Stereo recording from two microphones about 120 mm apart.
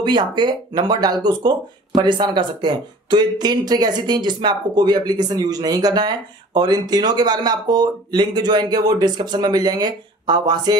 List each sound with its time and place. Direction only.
0.0 s speech: 40° right (ahead or behind)